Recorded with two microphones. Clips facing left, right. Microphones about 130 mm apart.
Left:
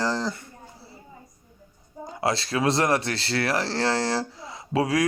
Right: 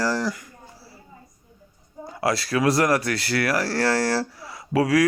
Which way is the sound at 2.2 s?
25° left (ahead or behind).